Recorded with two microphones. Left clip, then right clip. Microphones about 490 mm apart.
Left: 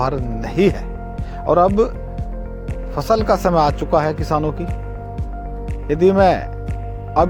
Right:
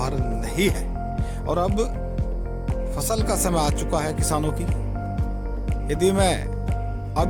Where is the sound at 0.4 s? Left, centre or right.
Right.